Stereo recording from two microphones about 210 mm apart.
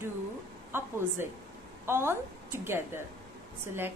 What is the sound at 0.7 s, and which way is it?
A woman's voice, 10° right (ahead or behind).